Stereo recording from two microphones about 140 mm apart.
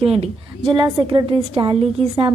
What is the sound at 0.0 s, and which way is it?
A woman's voice, 45° right (ahead or behind).